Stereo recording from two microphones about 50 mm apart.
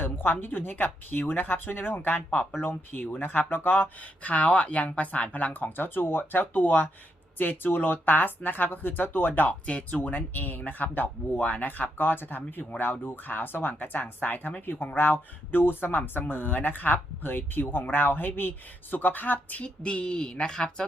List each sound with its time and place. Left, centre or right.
0.0 s speech: left
9.6 s a woman's voice: left
10.0 s speech: left
19.6 s a woman's voice: left